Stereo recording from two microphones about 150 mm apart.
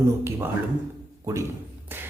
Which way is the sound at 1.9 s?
15° right (ahead or behind).